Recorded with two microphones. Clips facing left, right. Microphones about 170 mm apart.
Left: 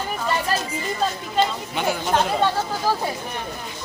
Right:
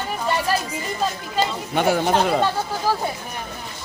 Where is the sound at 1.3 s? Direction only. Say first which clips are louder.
Right 1 dB; 50° right (ahead or behind).